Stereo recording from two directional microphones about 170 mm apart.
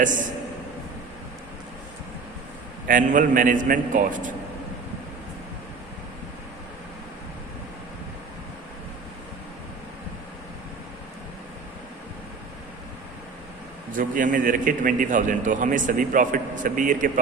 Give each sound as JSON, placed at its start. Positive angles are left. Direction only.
{"t": 0.0, "sound": "a man's voice", "side_deg": -50}
{"t": 2.8, "sound": "a man's voice", "side_deg": -50}
{"t": 13.9, "sound": "a man's voice", "side_deg": -50}